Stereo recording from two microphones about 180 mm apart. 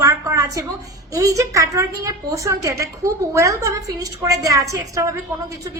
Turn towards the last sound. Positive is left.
turn(degrees=-20)  # may be behind; listen again after turning